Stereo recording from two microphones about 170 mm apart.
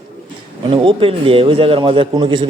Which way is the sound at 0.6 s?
30° right (ahead or behind).